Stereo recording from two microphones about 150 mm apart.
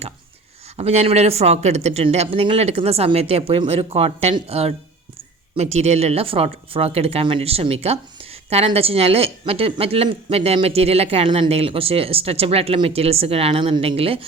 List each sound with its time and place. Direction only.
0.8 s speech: 45° right (ahead or behind)